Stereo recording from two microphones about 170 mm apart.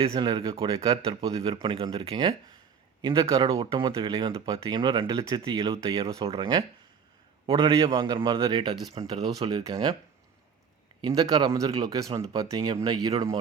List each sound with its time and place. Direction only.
0.0 s speech: 30° right (ahead or behind)
6.1 s speech: 35° right (ahead or behind)
11.0 s speech: 20° right (ahead or behind)